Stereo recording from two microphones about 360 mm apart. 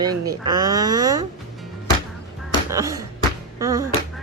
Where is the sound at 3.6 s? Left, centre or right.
Centre.